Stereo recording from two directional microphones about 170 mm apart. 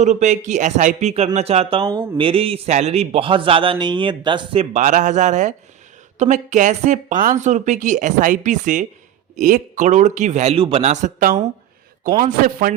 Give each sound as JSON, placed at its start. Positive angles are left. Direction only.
{"t": 0.0, "sound": "a woman's voice", "side_deg": -45}